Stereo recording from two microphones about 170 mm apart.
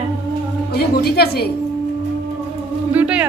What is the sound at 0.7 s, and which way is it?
Speech, 65° left (ahead or behind).